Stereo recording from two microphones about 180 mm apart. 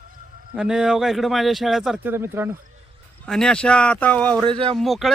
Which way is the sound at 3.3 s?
5° left (ahead or behind).